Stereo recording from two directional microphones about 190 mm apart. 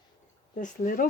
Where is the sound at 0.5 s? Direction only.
45° left (ahead or behind).